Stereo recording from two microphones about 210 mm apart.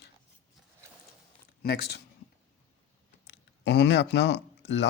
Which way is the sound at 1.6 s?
50° left (ahead or behind).